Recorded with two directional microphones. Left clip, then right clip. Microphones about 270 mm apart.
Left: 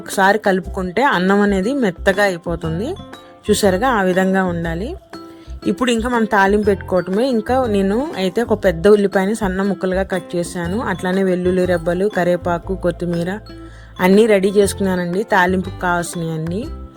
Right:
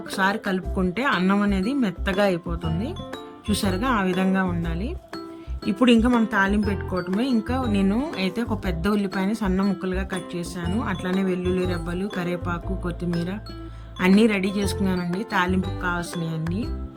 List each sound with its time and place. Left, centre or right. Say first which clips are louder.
0.1 s speech: left 10 dB; centre